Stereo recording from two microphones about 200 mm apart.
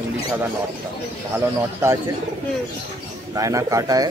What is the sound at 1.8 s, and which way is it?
Speech, 15° right (ahead or behind).